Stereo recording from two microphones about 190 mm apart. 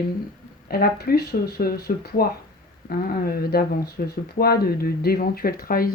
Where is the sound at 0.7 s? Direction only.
50° left (ahead or behind).